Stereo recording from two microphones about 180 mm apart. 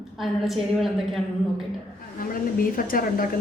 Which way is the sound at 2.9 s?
50° left (ahead or behind).